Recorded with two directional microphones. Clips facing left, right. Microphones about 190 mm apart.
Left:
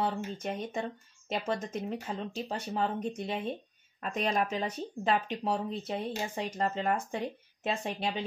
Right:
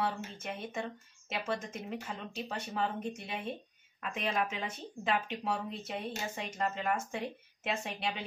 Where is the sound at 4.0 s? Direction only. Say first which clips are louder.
Left 4 dB; 40° left (ahead or behind).